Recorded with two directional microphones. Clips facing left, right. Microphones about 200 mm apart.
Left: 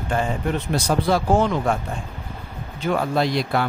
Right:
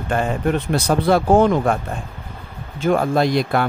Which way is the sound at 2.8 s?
50° right (ahead or behind).